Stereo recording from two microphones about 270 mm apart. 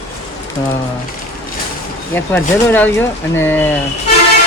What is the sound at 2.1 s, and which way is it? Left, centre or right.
Speech, centre.